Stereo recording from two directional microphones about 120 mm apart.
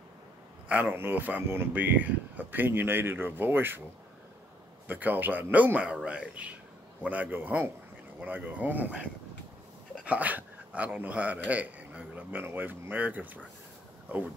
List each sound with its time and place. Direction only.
0.7 s speech: 15° right (ahead or behind)
4.8 s speech: 15° right (ahead or behind)
10.0 s speech: 15° right (ahead or behind)